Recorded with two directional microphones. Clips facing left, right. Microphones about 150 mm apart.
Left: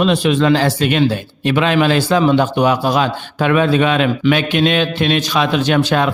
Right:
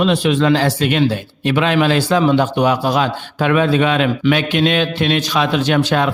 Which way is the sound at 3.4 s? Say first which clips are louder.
Left 1 dB; 40° left (ahead or behind).